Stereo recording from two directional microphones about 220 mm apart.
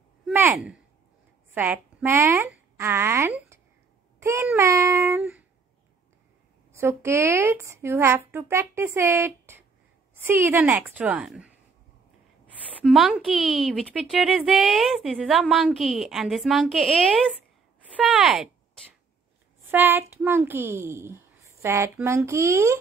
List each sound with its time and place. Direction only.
0.3 s a child's voice: 10° right (ahead or behind)
6.7 s a child's voice: 10° right (ahead or behind)
12.8 s a woman's voice: 5° right (ahead or behind)
19.7 s a child's voice: 10° right (ahead or behind)